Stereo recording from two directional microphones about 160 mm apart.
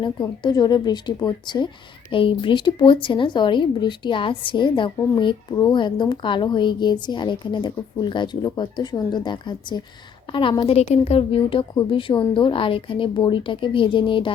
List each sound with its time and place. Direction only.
0.0 s speech: 25° left (ahead or behind)
10.8 s speech: 40° left (ahead or behind)